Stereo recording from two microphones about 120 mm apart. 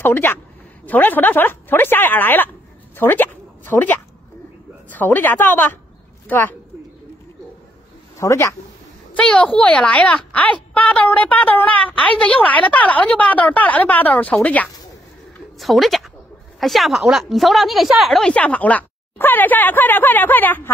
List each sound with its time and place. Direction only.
0.0 s speech: 15° left (ahead or behind)
8.2 s speech: 25° left (ahead or behind)
9.1 s speech: 10° left (ahead or behind)
15.6 s speech: centre (ahead or behind); by 20.7 s 15° left (ahead or behind)